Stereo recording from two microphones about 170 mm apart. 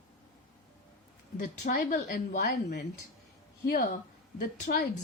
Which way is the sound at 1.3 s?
50° left (ahead or behind).